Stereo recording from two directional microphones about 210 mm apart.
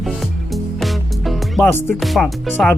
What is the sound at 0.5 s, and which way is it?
Music, centre (ahead or behind).